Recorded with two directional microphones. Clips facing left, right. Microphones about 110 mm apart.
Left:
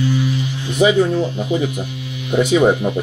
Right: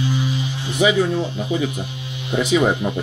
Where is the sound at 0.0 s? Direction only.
20° right (ahead or behind).